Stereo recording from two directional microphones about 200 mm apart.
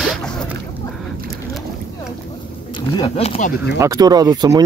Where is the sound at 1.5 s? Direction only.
Centre (ahead or behind).